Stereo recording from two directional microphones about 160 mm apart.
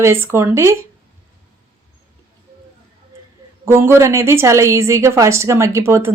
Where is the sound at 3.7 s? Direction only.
15° right (ahead or behind).